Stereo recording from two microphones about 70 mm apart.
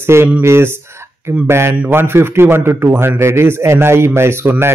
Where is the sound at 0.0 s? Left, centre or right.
Right.